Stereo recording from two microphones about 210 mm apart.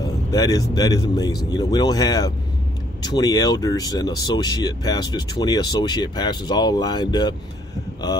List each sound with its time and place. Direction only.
0.0 s speech: 20° left (ahead or behind)